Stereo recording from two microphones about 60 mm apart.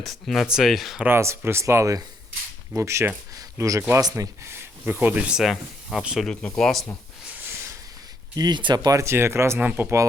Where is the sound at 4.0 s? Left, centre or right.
Right.